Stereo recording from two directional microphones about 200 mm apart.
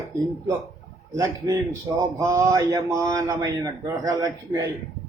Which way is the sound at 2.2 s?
15° right (ahead or behind).